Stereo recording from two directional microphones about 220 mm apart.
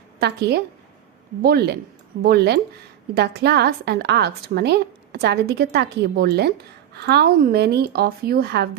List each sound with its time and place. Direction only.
0.2 s a woman's voice: 50° right (ahead or behind)